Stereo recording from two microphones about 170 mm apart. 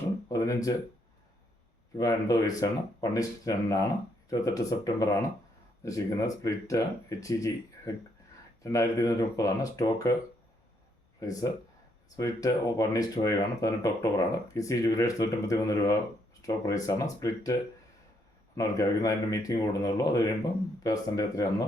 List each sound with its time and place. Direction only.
0.3 s a sound: 20° left (ahead or behind)
2.0 s speech: 20° left (ahead or behind)
8.6 s speech: 20° left (ahead or behind)
11.2 s speech: 20° left (ahead or behind)
18.5 s speech: 20° left (ahead or behind)